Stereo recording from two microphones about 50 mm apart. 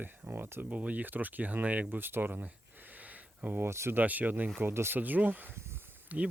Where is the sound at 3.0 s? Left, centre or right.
Right.